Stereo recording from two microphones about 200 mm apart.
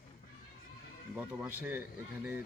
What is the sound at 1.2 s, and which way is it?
Speech, 10° right (ahead or behind).